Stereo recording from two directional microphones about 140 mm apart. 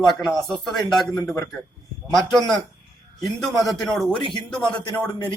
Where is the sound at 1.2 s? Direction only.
20° left (ahead or behind).